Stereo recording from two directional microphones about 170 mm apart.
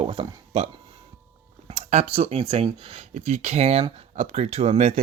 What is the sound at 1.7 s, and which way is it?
Speech, 40° right (ahead or behind).